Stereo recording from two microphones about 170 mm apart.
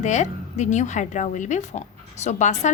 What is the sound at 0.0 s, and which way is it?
A woman's voice, 45° left (ahead or behind).